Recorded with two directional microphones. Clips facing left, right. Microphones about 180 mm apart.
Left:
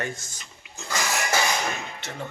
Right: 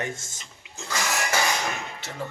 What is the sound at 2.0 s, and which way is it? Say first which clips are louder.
Speech: left 1 dB; centre (ahead or behind).